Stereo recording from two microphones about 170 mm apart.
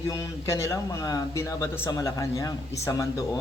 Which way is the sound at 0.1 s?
20° left (ahead or behind).